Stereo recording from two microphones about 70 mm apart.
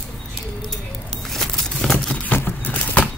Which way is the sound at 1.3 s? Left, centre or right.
Centre.